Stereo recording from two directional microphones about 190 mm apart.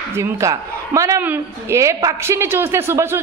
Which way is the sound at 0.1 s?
15° right (ahead or behind).